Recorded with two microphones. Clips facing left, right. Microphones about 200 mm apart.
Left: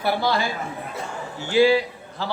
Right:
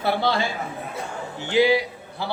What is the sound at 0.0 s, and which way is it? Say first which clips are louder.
A man's voice: even; 25° right (ahead or behind).